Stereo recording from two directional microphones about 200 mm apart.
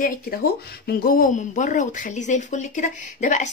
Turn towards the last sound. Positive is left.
turn(degrees=40)  # may be behind; listen again after turning